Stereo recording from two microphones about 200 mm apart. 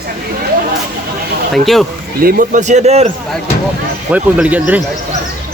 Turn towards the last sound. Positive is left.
turn(degrees=-10)  # may be behind; listen again after turning